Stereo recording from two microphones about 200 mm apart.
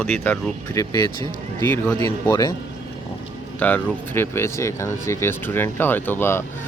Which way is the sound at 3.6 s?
10° left (ahead or behind).